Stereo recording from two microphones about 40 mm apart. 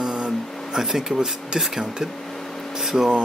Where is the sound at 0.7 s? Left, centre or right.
Centre.